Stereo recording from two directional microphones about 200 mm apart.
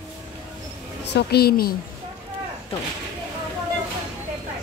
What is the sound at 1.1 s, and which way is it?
Speech, 50° left (ahead or behind).